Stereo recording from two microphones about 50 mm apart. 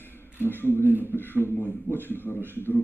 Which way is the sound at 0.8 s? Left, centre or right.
Right.